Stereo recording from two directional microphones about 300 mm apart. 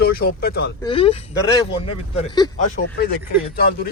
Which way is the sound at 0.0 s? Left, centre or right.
Left.